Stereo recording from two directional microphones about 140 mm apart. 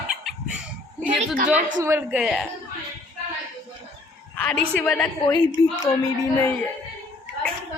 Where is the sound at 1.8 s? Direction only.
15° right (ahead or behind).